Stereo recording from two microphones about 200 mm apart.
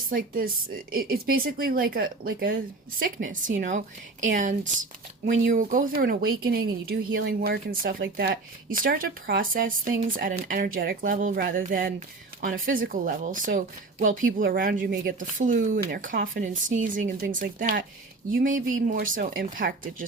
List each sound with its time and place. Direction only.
0.1 s speech: 45° right (ahead or behind)